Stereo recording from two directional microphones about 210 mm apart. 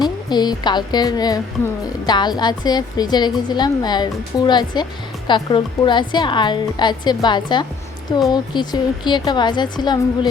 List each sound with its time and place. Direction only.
0.0 s a woman's voice: 20° left (ahead or behind)